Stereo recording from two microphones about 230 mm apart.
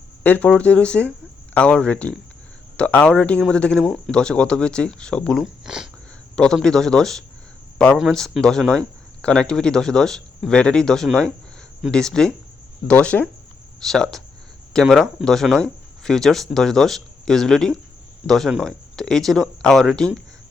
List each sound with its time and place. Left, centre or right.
0.2 s speech: centre